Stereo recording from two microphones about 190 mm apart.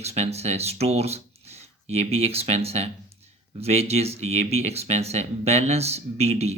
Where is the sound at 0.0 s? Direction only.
35° right (ahead or behind).